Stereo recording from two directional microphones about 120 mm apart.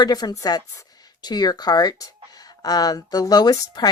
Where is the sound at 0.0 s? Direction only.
35° left (ahead or behind).